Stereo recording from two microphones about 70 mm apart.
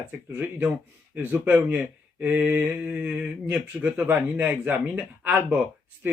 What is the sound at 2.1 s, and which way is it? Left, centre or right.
Mantra, centre.